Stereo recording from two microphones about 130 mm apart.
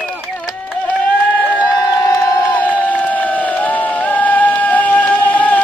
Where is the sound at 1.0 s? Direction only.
10° left (ahead or behind).